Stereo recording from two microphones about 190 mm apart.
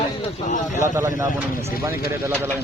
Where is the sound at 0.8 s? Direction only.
15° right (ahead or behind).